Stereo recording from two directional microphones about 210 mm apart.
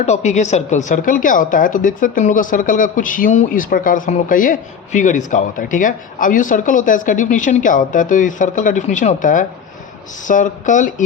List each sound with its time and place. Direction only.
0.0 s a woman's voice: 35° left (ahead or behind)